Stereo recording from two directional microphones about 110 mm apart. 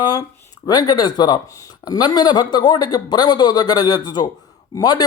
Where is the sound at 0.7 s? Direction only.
40° left (ahead or behind).